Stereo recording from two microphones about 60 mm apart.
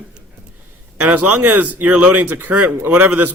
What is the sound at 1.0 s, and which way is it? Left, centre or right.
A man's voice, right.